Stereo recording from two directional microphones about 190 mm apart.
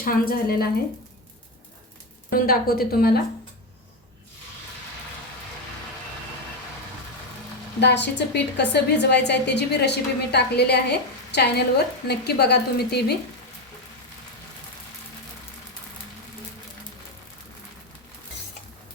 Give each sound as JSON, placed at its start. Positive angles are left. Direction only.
{"t": 0.0, "sound": "a woman's voice", "side_deg": 50}
{"t": 2.3, "sound": "a woman's voice", "side_deg": 50}
{"t": 7.8, "sound": "a woman's voice", "side_deg": 65}